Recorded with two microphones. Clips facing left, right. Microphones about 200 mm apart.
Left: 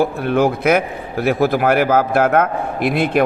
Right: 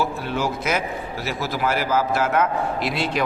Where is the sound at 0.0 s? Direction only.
55° left (ahead or behind).